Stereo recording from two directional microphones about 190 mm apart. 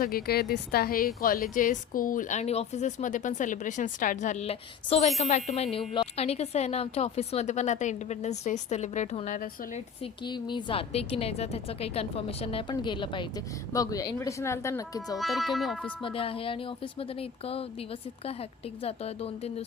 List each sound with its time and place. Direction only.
0.0 s a woman's voice: 50° left (ahead or behind)
10.0 s a woman's voice: 25° left (ahead or behind)
15.2 s speech: centre (ahead or behind)
16.0 s a woman's voice: 30° left (ahead or behind)